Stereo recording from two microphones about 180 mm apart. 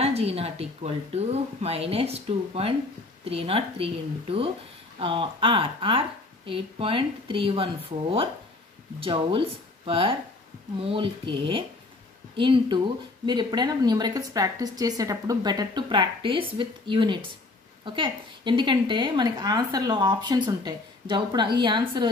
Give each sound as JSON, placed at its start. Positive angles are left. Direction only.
{"t": 0.0, "sound": "a woman's voice", "side_deg": -35}